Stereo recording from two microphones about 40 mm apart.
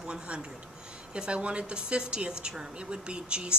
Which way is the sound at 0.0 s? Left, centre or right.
Right.